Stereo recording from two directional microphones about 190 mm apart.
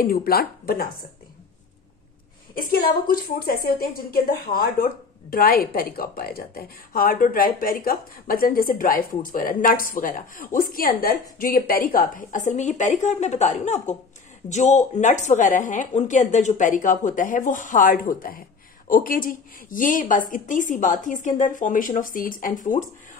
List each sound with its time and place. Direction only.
0.0 s a woman's voice: 50° left (ahead or behind)
2.7 s a woman's voice: 50° left (ahead or behind)